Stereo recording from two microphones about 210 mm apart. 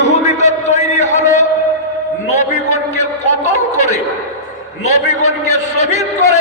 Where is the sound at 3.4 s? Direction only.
35° left (ahead or behind).